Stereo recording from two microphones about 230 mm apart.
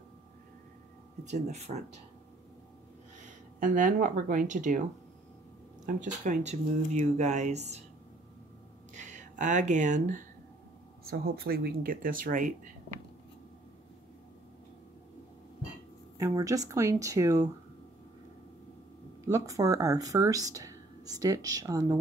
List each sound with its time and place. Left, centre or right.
1.2 s speech: right
3.2 s speech: right
5.9 s speech: right
8.9 s speech: right
16.2 s speech: centre
19.2 s speech: centre